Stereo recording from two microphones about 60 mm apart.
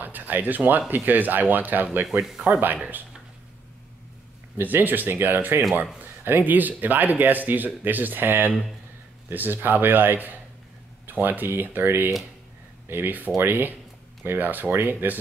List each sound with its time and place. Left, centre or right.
0.0 s speech: right
4.6 s speech: right